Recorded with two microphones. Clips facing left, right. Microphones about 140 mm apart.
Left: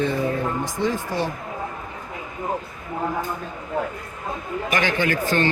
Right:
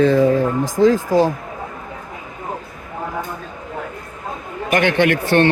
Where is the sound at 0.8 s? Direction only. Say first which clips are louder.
Right 11 dB; 35° right (ahead or behind).